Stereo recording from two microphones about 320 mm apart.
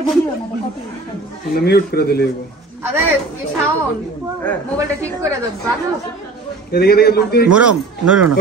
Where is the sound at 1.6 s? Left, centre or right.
Left.